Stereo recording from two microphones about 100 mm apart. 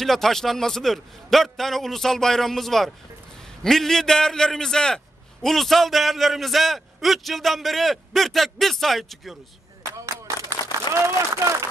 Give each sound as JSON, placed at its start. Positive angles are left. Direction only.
{"t": 0.0, "sound": "a man's voice", "side_deg": 5}
{"t": 9.9, "sound": "a sound", "side_deg": -30}
{"t": 11.0, "sound": "speech", "side_deg": -30}